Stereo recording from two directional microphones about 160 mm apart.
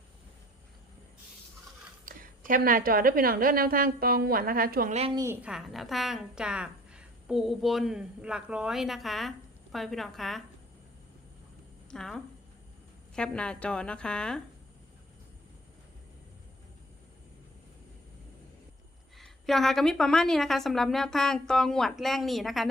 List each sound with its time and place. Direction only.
2.0 s a woman's voice: 60° right (ahead or behind)
5.1 s a woman's voice: 15° right (ahead or behind)
5.5 s a woman's voice: centre (ahead or behind)
11.9 s a woman's voice: 5° left (ahead or behind)
19.1 s a woman's voice: centre (ahead or behind)